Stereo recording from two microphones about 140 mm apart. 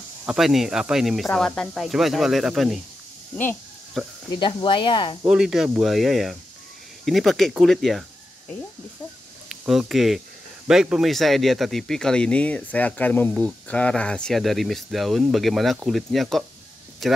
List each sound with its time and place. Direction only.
0.3 s speech: centre (ahead or behind)
4.0 s speech: centre (ahead or behind)
4.3 s speech: 35° left (ahead or behind)
5.2 s speech: 5° right (ahead or behind)
9.5 s speech: centre (ahead or behind)